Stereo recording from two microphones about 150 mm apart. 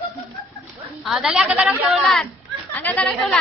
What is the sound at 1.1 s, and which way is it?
Speech, 5° right (ahead or behind).